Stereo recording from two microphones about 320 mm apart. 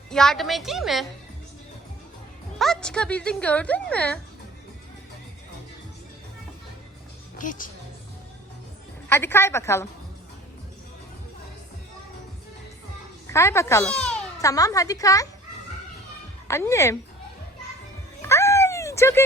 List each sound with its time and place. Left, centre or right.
0.1 s speech: centre
2.6 s speech: centre
7.3 s a woman's voice: left
9.0 s a woman's voice: centre
13.3 s a woman's voice: centre
16.5 s a woman's voice: centre
18.2 s a sound: centre